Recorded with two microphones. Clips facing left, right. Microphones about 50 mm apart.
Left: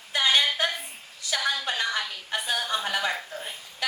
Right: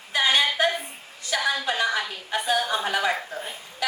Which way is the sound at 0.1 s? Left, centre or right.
Right.